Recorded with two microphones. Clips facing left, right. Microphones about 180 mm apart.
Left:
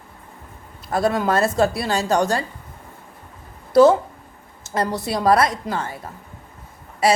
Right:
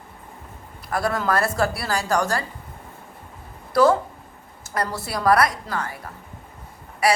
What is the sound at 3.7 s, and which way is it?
Speech, 25° left (ahead or behind).